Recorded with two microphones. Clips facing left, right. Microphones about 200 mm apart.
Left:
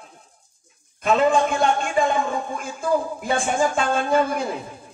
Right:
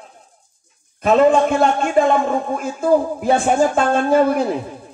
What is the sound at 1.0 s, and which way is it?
A man's voice, 40° right (ahead or behind).